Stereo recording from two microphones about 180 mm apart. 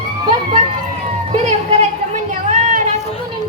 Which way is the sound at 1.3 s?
40° right (ahead or behind).